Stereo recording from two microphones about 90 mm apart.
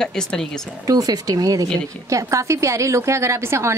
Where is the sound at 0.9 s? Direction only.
45° right (ahead or behind).